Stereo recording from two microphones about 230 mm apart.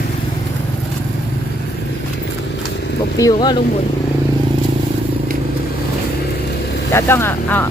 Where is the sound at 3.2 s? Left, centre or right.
Centre.